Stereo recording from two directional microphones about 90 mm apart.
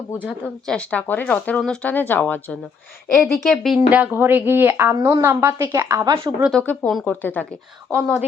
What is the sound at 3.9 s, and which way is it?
Speech, 20° right (ahead or behind).